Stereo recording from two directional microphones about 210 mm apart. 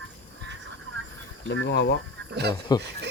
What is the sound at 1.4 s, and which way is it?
Speech, 60° left (ahead or behind).